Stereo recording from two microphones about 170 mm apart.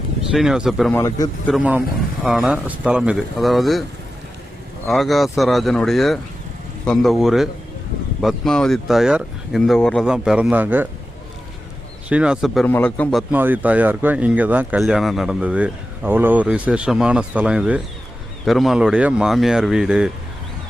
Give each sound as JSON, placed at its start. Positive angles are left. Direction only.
{"t": 0.3, "sound": "speech", "side_deg": -5}
{"t": 0.9, "sound": "a man's voice", "side_deg": 20}
{"t": 2.2, "sound": "speech", "side_deg": 0}
{"t": 4.9, "sound": "speech", "side_deg": 0}
{"t": 12.0, "sound": "speech", "side_deg": -5}
{"t": 12.6, "sound": "a man's voice", "side_deg": 10}
{"t": 13.3, "sound": "speech", "side_deg": -10}